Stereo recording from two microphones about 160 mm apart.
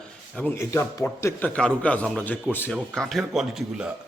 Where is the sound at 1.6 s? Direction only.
5° left (ahead or behind).